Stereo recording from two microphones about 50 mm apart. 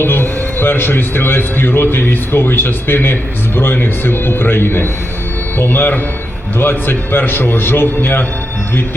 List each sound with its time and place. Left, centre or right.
0.0 s a man's voice: left